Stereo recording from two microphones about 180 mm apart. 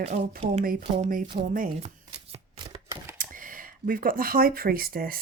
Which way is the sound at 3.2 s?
50° right (ahead or behind).